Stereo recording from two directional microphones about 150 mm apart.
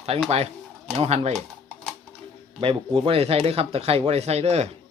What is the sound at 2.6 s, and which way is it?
Speech, 35° right (ahead or behind).